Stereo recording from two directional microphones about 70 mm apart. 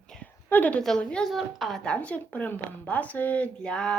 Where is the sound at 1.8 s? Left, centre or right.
Centre.